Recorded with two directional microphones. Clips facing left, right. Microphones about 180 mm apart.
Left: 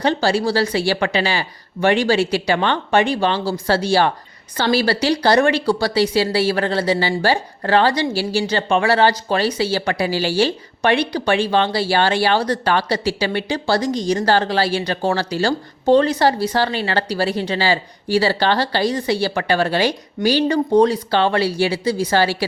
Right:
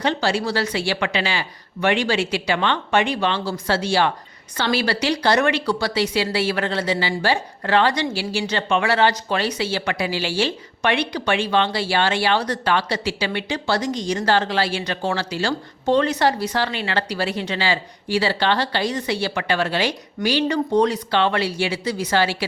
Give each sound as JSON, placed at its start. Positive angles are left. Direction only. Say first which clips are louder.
{"t": 0.0, "sound": "speech", "louder": "left 4 dB", "side_deg": 35}